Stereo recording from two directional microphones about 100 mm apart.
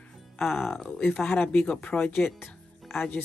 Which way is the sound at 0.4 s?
Centre (ahead or behind).